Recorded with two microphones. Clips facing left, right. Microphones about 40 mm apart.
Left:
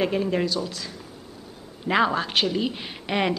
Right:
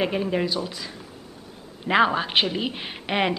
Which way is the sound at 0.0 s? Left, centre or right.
Centre.